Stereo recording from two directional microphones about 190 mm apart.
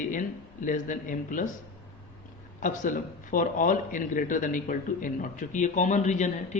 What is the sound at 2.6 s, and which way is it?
A man's voice, 45° left (ahead or behind).